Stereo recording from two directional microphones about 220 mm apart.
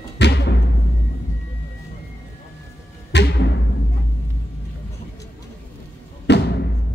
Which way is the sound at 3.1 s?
50° left (ahead or behind).